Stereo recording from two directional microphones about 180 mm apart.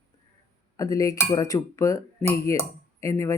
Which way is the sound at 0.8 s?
20° left (ahead or behind).